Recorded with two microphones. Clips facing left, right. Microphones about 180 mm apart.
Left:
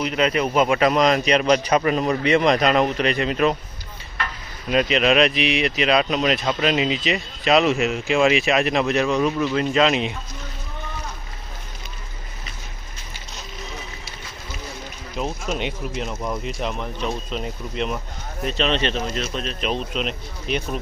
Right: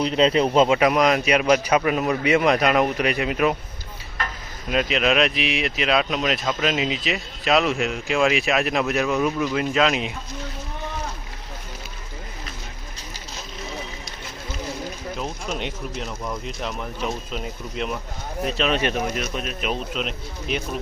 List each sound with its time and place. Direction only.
0.0 s a man's voice: 30° right (ahead or behind)
0.8 s a man's voice: 10° right (ahead or behind)
4.7 s speech: centre (ahead or behind)
15.2 s speech: 5° left (ahead or behind)
16.0 s speech: 15° left (ahead or behind)
16.5 s a man's voice: centre (ahead or behind)